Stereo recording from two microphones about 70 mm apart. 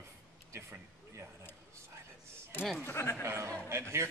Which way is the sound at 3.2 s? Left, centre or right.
Right.